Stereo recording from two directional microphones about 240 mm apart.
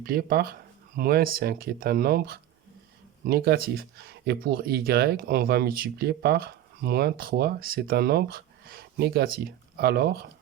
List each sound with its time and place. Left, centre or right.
0.0 s speech: right